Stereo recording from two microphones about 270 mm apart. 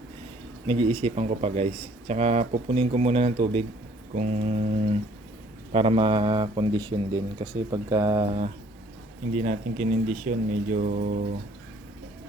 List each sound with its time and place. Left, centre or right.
0.7 s speech: centre